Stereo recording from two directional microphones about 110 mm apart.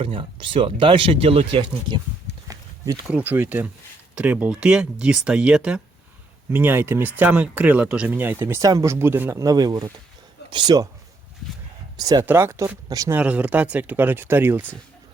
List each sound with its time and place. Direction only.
0.0 s speech: 55° right (ahead or behind)
2.5 s a sound: 35° right (ahead or behind)
3.2 s speech: 15° right (ahead or behind)
8.6 s speech: 30° right (ahead or behind)
9.4 s speech: 35° right (ahead or behind)
11.9 s speech: 35° right (ahead or behind)
12.2 s speech: 20° right (ahead or behind)
13.1 s speech: 10° right (ahead or behind)